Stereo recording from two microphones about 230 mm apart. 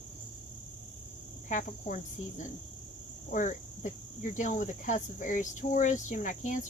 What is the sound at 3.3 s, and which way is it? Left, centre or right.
Speech, left.